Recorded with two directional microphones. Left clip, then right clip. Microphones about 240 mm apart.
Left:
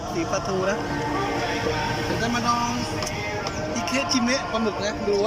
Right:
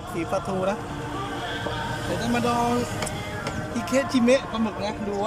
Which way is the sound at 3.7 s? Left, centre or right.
Centre.